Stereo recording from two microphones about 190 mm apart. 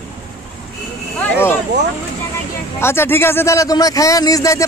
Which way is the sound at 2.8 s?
10° left (ahead or behind).